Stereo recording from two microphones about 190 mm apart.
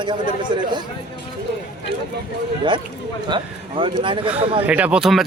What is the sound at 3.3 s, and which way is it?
A man's voice, 25° right (ahead or behind).